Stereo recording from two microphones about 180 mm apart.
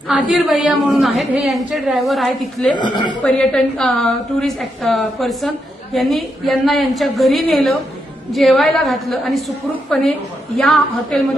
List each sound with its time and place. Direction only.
0.3 s a woman's voice: 5° right (ahead or behind)
2.7 s speech: 25° left (ahead or behind)
3.2 s a woman's voice: centre (ahead or behind)